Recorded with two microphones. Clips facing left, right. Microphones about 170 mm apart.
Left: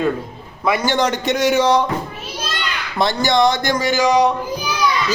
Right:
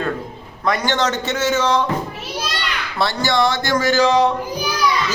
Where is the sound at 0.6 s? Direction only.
10° left (ahead or behind).